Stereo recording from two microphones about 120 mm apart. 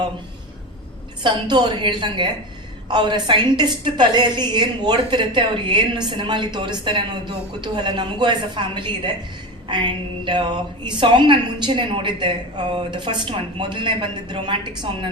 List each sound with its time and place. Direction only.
1.2 s a woman's voice: 40° right (ahead or behind)